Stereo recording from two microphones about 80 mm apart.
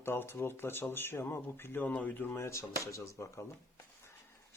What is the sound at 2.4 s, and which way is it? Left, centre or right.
Speech, left.